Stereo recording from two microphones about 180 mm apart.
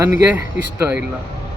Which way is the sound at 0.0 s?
15° right (ahead or behind).